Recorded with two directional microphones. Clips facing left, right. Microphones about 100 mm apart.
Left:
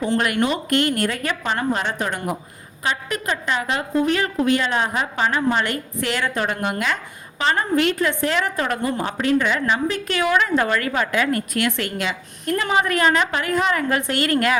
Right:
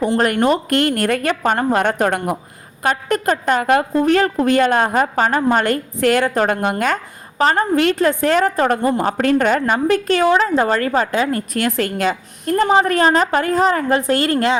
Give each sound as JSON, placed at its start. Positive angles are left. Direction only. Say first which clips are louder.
{"t": 0.2, "sound": "a woman's voice", "louder": "right 5 dB", "side_deg": -40}
{"t": 2.8, "sound": "a woman's voice", "louder": "right 7 dB", "side_deg": -45}
{"t": 10.2, "sound": "a woman's voice", "louder": "right 2 dB", "side_deg": -30}